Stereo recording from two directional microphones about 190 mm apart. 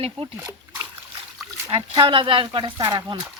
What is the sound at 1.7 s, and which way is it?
Speech, 30° right (ahead or behind).